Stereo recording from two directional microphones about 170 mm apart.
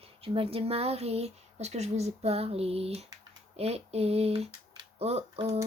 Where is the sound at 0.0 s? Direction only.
35° right (ahead or behind).